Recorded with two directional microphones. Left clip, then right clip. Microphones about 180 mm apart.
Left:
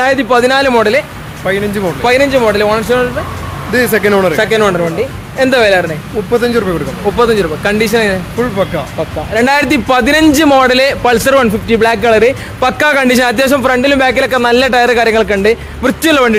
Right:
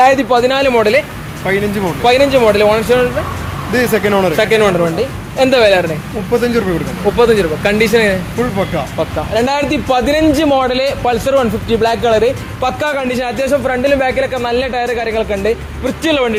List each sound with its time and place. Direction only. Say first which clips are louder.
0.0 s a man's voice: right 1 dB; 20° left (ahead or behind)
0.3 s a man's voice: left 2 dB; 30° left (ahead or behind); by 3.1 s 10° left (ahead or behind)
3.7 s speech: left 3 dB; 25° left (ahead or behind)
4.4 s speech: left 1 dB; 10° left (ahead or behind)
5.4 s speech: left 1 dB; 15° left (ahead or behind)
6.4 s a man's voice: left 2 dB; 30° left (ahead or behind)
7.2 s speech: even; 15° left (ahead or behind)
9.3 s a man's voice: left 5 dB; 40° left (ahead or behind)